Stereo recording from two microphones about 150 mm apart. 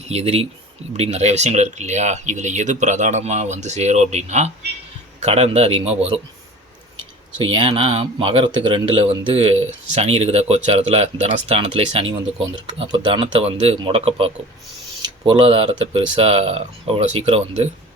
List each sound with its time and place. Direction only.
0.1 s speech: 45° right (ahead or behind)
7.3 s speech: 35° right (ahead or behind)
12.5 s speech: 30° right (ahead or behind)